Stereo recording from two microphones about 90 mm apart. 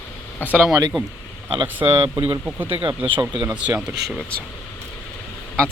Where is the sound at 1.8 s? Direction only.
20° right (ahead or behind).